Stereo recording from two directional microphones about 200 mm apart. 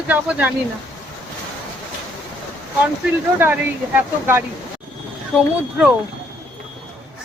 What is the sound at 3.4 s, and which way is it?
Speech, 10° right (ahead or behind).